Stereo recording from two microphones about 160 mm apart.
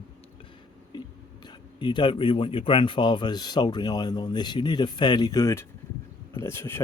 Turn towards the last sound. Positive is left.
turn(degrees=15)  # may be behind; listen again after turning